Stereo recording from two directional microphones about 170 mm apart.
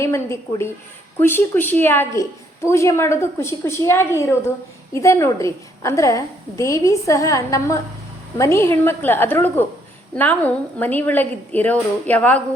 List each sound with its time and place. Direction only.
0.0 s a woman's voice: 15° left (ahead or behind)